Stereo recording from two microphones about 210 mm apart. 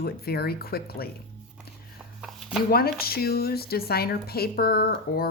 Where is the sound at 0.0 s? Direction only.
50° left (ahead or behind).